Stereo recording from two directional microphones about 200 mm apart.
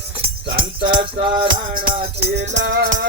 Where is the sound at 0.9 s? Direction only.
25° right (ahead or behind).